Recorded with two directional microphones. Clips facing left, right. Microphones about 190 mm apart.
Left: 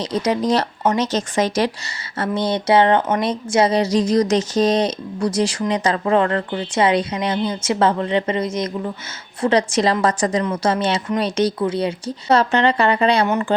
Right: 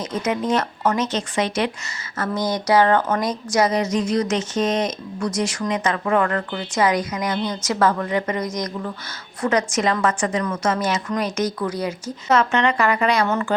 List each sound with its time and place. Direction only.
0.0 s speech: 35° left (ahead or behind)
2.1 s speech: 30° left (ahead or behind)